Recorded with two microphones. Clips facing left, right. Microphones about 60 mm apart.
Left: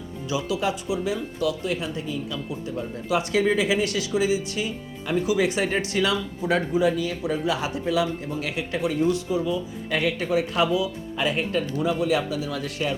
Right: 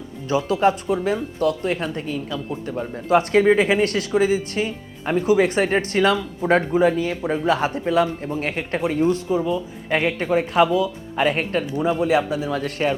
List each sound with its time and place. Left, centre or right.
0.3 s speech: right